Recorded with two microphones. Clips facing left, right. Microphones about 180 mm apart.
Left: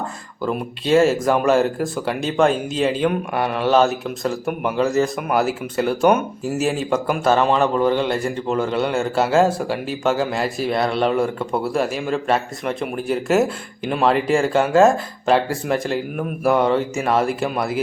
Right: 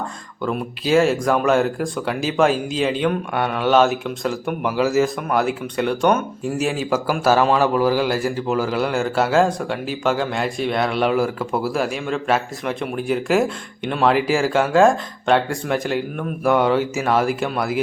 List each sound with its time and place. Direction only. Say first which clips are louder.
0.9 s speech: left 1 dB; centre (ahead or behind)